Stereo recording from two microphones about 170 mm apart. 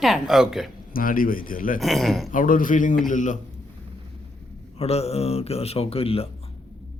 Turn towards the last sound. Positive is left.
turn(degrees=35)  # may be behind; listen again after turning